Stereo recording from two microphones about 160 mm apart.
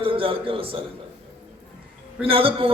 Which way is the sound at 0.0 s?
35° right (ahead or behind).